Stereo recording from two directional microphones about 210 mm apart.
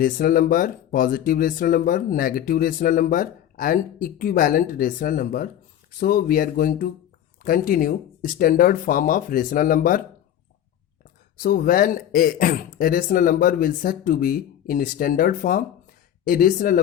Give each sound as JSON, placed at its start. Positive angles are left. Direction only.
{"t": 0.0, "sound": "speech", "side_deg": 40}
{"t": 11.3, "sound": "speech", "side_deg": 40}